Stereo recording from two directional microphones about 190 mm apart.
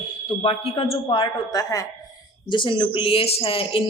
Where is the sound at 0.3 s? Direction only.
30° left (ahead or behind).